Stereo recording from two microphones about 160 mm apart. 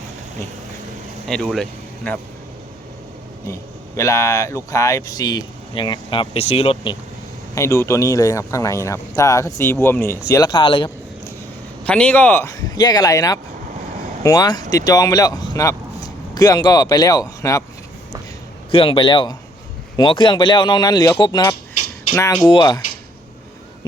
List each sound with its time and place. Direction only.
1.3 s speech: centre (ahead or behind)
3.4 s speech: 15° left (ahead or behind); by 6.9 s 35° left (ahead or behind)
7.5 s speech: 15° left (ahead or behind)
11.9 s speech: 10° left (ahead or behind)
18.7 s a man's voice: 35° left (ahead or behind)
22.1 s speech: 10° left (ahead or behind)
22.4 s speech: 30° left (ahead or behind)